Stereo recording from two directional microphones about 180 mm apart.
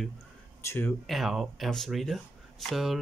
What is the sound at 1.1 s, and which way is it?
Speech, centre (ahead or behind).